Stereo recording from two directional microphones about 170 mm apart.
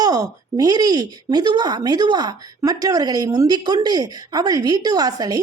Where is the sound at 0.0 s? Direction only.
20° right (ahead or behind).